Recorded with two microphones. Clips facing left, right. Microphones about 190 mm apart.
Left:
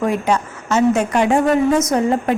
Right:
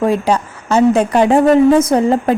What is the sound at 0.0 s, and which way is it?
A woman's voice, 30° right (ahead or behind).